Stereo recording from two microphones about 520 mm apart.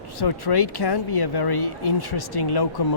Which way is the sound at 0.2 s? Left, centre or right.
Left.